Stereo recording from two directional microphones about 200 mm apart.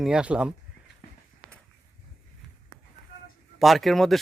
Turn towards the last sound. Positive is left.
turn(degrees=0)  # may be behind; listen again after turning